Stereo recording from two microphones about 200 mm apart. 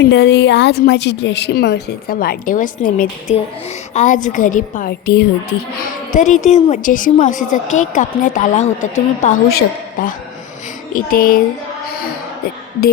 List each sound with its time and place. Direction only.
0.0 s a woman's voice: 60° left (ahead or behind)
5.8 s a woman's voice: 40° left (ahead or behind)
9.5 s a woman's voice: 50° left (ahead or behind)